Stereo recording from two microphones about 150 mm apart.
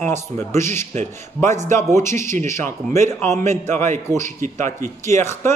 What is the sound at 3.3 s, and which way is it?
Speech, 50° right (ahead or behind).